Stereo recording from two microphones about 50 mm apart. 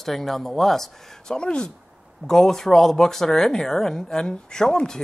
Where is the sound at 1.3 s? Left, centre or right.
Centre.